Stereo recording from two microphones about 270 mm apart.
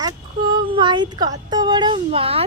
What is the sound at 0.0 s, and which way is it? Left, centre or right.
Speech, centre.